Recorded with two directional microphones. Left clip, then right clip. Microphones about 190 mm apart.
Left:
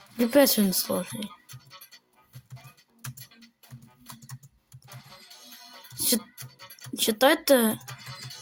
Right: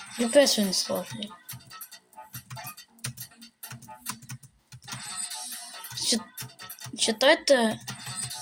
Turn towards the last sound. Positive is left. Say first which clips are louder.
# even
turn(degrees=60)  # may be behind; listen again after turning